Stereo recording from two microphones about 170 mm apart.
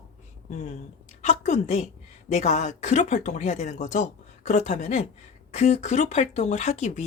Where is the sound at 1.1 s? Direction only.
45° left (ahead or behind).